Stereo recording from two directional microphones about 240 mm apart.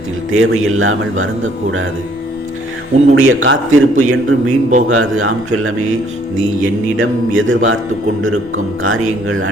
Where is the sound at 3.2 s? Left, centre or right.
Right.